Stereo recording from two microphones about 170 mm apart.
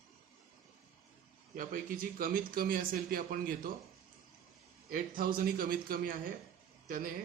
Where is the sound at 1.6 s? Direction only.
55° right (ahead or behind).